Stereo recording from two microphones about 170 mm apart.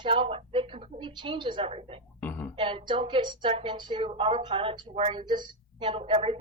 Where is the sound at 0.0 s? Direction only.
30° right (ahead or behind).